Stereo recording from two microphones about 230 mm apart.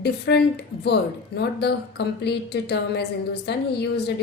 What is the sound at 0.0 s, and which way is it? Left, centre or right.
A woman's voice, left.